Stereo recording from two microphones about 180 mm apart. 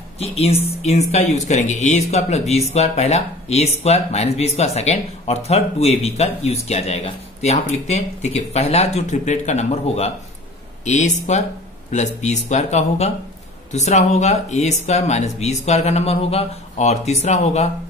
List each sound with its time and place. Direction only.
0.2 s speech: 35° left (ahead or behind)